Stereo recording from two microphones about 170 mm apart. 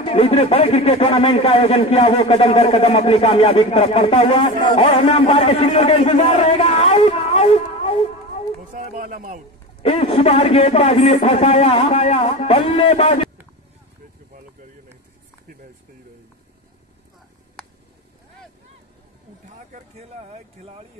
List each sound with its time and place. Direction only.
0.0 s a man's voice: 35° left (ahead or behind)
8.7 s a sound: 55° right (ahead or behind)
9.8 s a man's voice: 35° left (ahead or behind)
19.7 s vehicle: 40° right (ahead or behind)